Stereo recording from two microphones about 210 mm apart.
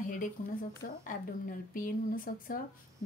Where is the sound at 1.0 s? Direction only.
40° left (ahead or behind).